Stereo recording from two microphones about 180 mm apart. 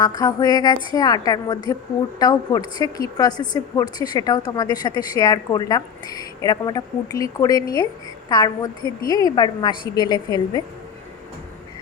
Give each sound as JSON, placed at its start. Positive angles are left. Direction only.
{"t": 0.0, "sound": "a woman's voice", "side_deg": 20}